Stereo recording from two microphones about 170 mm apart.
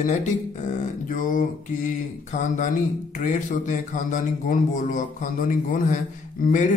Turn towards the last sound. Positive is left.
turn(degrees=50)  # may be behind; listen again after turning